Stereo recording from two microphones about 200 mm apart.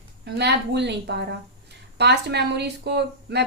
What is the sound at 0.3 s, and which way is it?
Speech, 60° right (ahead or behind).